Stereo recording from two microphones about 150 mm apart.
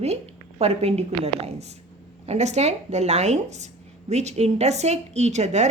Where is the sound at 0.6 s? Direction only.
45° right (ahead or behind).